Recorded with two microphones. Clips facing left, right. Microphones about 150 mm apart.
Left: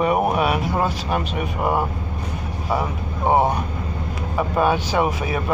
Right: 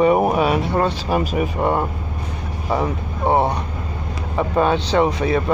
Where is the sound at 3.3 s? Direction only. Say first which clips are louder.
Even; 10° left (ahead or behind).